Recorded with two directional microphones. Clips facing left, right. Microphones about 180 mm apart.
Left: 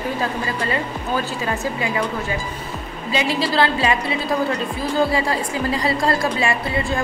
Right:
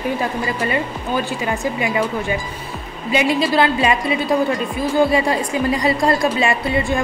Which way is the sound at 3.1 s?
20° right (ahead or behind).